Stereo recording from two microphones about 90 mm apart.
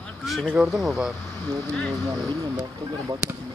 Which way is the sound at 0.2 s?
Centre (ahead or behind).